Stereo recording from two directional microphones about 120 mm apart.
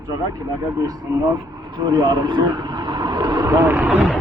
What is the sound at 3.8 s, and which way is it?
Speech, 5° right (ahead or behind).